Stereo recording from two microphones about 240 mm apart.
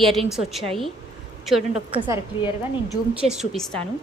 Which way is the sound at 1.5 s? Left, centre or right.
Centre.